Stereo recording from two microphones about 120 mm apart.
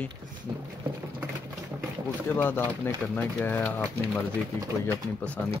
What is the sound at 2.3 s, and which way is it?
Speech, 15° left (ahead or behind).